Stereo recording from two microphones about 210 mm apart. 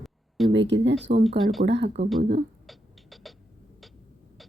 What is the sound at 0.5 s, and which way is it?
Speech, 60° right (ahead or behind).